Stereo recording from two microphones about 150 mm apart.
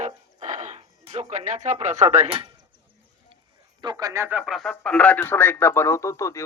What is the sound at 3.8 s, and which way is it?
Speech, 25° right (ahead or behind).